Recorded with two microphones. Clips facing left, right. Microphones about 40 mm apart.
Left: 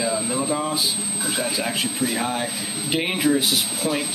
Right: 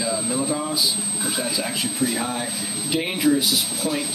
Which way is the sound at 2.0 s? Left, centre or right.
Centre.